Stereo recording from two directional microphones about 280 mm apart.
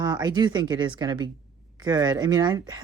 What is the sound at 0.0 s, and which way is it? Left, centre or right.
Speech, centre.